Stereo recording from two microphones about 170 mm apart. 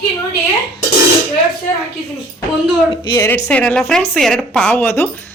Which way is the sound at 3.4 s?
5° left (ahead or behind).